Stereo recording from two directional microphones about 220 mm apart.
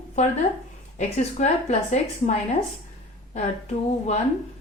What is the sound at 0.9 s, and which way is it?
A woman's voice, 35° left (ahead or behind).